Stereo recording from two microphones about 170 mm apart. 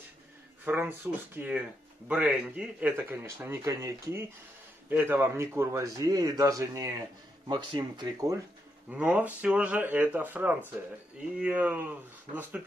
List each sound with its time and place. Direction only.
0.7 s speech: 10° right (ahead or behind)
8.9 s speech: 10° right (ahead or behind)